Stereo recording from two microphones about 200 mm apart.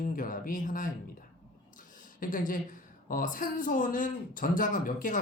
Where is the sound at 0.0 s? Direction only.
40° left (ahead or behind).